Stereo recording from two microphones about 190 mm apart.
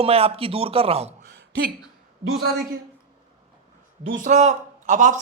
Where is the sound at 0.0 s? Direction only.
30° right (ahead or behind).